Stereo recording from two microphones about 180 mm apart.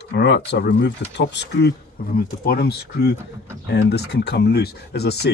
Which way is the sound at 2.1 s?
55° left (ahead or behind).